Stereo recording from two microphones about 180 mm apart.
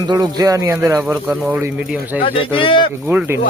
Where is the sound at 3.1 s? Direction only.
15° right (ahead or behind).